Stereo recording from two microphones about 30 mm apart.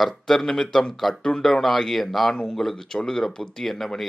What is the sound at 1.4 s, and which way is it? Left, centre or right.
Speech, centre.